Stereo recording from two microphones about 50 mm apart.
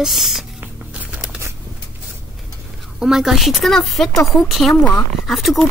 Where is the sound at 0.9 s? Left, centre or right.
Right.